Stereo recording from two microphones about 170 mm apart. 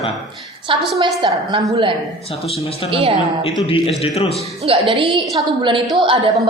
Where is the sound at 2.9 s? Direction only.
35° right (ahead or behind).